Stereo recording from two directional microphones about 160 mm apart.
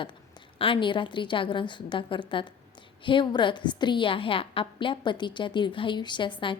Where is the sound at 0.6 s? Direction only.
30° left (ahead or behind).